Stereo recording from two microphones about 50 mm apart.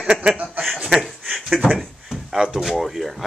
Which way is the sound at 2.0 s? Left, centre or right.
Centre.